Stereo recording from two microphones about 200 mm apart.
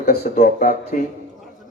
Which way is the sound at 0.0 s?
45° left (ahead or behind).